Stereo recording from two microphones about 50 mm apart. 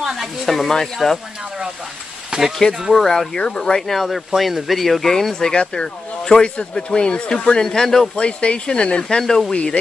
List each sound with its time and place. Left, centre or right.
0.0 s speech: centre
2.3 s speech: centre
2.9 s speech: centre
3.3 s speech: centre
3.9 s speech: centre
8.2 s speech: left
9.2 s speech: centre
9.5 s speech: centre